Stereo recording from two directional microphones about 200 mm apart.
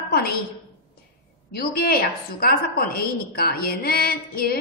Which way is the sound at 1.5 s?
50° left (ahead or behind).